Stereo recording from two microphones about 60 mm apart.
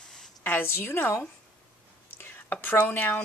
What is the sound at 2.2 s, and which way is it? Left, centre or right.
Whispering, left.